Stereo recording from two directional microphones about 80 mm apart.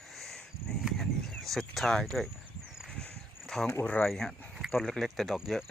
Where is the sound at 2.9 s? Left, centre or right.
Centre.